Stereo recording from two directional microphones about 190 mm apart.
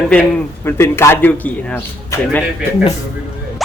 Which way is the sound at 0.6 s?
10° left (ahead or behind).